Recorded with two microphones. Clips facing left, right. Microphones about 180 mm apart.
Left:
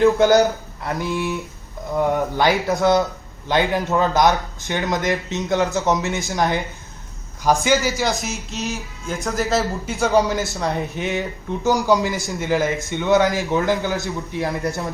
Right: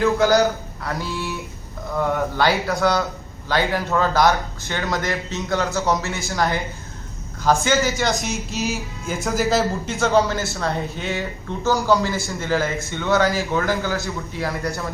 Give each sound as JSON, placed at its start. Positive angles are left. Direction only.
{"t": 0.0, "sound": "a man's voice", "side_deg": 20}
{"t": 7.9, "sound": "speech", "side_deg": 5}
{"t": 10.0, "sound": "a man's voice", "side_deg": 15}